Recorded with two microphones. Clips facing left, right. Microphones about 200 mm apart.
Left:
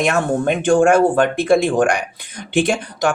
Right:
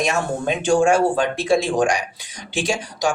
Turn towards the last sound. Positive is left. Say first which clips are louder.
# left 5 dB
turn(degrees=60)  # may be behind; listen again after turning